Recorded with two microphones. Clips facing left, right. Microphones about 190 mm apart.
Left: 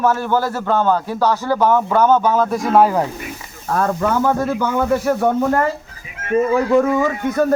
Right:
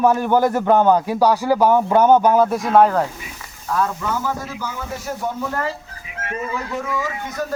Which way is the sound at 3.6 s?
50° left (ahead or behind).